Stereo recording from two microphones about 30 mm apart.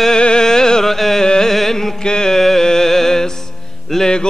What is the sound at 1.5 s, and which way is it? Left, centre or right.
Music, centre.